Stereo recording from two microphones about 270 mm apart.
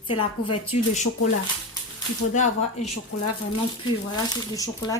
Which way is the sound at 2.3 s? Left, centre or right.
Left.